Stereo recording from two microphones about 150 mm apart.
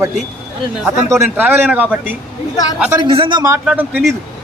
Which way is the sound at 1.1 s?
10° right (ahead or behind).